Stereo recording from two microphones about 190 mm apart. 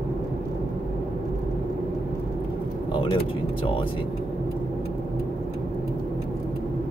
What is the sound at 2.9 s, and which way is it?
Vehicle, 25° left (ahead or behind).